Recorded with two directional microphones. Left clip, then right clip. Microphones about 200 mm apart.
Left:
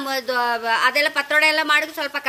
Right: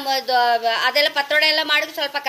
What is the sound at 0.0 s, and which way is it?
A woman's voice, 55° left (ahead or behind).